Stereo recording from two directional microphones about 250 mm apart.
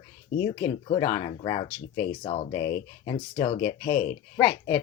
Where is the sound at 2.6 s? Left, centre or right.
Left.